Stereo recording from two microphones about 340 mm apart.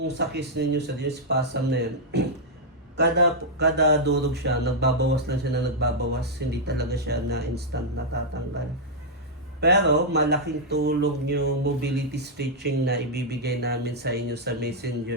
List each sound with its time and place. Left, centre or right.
0.2 s speech: right
3.0 s speech: right
9.6 s speech: right